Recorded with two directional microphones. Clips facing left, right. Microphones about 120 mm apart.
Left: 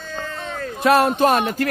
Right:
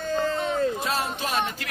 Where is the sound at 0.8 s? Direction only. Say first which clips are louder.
Left 13 dB; 65° left (ahead or behind).